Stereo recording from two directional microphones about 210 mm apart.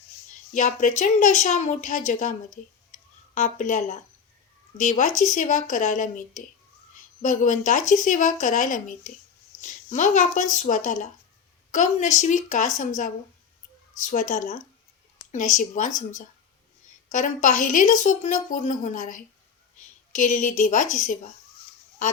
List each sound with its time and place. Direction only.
0.5 s a woman's voice: 40° left (ahead or behind)
2.9 s a sound: 35° left (ahead or behind)
4.8 s a woman's voice: 35° left (ahead or behind)
14.0 s a woman's voice: 35° left (ahead or behind)
17.1 s a woman's voice: 35° left (ahead or behind)